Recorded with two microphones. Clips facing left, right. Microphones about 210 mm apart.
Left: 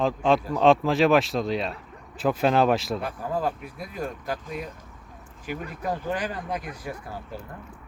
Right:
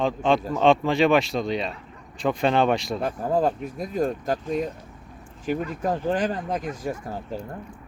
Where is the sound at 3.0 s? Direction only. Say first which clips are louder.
Right 5 dB; 45° right (ahead or behind).